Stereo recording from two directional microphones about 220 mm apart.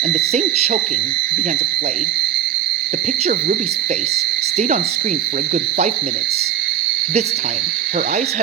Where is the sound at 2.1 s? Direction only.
40° right (ahead or behind).